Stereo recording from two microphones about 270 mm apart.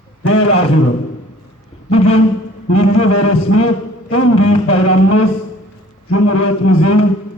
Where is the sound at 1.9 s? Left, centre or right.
Left.